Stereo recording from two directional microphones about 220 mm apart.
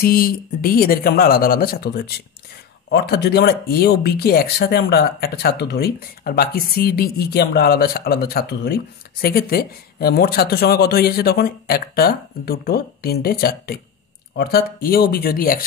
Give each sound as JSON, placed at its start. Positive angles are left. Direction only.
{"t": 0.0, "sound": "speech", "side_deg": 40}